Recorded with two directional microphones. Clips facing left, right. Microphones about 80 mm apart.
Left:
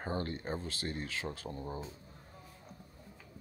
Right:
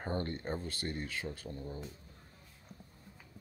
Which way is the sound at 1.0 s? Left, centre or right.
Centre.